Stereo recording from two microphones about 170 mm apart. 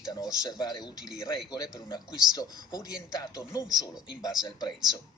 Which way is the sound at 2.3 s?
25° left (ahead or behind).